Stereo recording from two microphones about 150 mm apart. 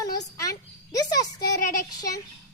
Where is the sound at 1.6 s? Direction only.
65° left (ahead or behind).